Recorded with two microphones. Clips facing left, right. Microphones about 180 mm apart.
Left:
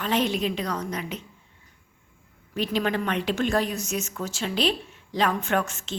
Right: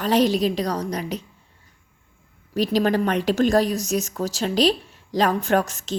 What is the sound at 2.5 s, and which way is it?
Speech, 40° right (ahead or behind).